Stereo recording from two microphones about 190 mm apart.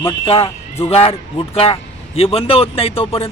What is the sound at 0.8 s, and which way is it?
A man's voice, 30° left (ahead or behind).